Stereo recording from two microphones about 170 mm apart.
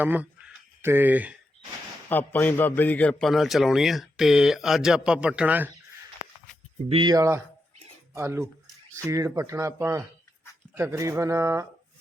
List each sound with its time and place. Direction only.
0.0 s speech: 10° right (ahead or behind)
2.0 s a man's voice: 10° left (ahead or behind); by 5.7 s 10° right (ahead or behind)
6.8 s speech: 30° right (ahead or behind)
8.6 s a sound: 10° left (ahead or behind)
9.0 s speech: 20° right (ahead or behind)